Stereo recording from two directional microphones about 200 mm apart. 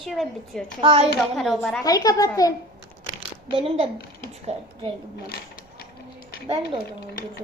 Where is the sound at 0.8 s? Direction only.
30° right (ahead or behind).